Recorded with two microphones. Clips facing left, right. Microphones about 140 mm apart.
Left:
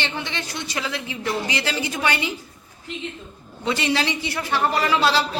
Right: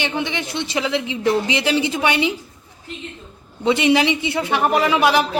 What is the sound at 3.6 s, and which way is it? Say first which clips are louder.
A woman's voice: right 7 dB; 20° right (ahead or behind).